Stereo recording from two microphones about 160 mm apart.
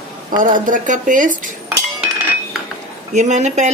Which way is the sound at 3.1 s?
45° right (ahead or behind).